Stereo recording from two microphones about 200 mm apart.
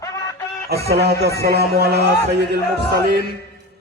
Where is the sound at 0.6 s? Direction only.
50° right (ahead or behind).